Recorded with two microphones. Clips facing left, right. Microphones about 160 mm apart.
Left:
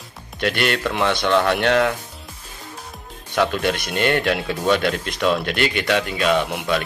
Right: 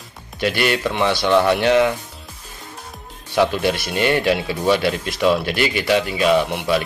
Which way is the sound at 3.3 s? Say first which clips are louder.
Right 2 dB; 5° right (ahead or behind).